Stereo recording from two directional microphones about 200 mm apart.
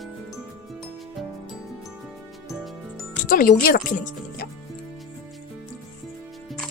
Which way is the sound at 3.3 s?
45° left (ahead or behind).